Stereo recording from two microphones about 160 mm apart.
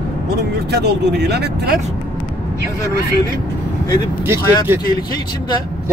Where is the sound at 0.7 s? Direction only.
90° right.